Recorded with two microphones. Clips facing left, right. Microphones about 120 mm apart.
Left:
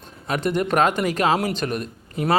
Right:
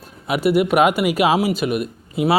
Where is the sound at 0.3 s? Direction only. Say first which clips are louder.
Right 5 dB; 10° right (ahead or behind).